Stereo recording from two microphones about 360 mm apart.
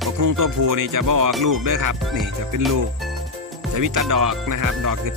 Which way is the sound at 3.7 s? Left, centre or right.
Right.